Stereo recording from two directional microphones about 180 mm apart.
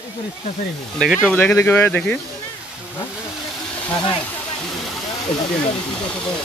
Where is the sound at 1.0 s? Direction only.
Centre (ahead or behind).